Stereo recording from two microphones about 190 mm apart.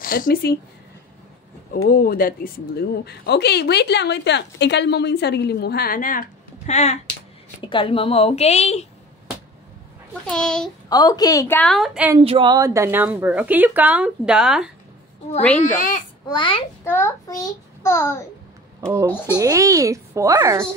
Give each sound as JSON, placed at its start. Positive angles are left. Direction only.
{"t": 0.0, "sound": "speech", "side_deg": 50}
{"t": 1.9, "sound": "a woman's voice", "side_deg": 50}
{"t": 10.2, "sound": "a child's voice", "side_deg": 5}
{"t": 10.9, "sound": "a woman's voice", "side_deg": 20}
{"t": 12.2, "sound": "speech", "side_deg": -30}
{"t": 15.6, "sound": "a child's voice", "side_deg": 45}
{"t": 16.3, "sound": "a child's voice", "side_deg": 25}
{"t": 16.8, "sound": "a child's voice", "side_deg": 10}
{"t": 19.3, "sound": "speech", "side_deg": -15}